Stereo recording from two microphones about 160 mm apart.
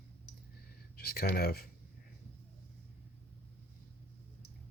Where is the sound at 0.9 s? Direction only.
75° left (ahead or behind).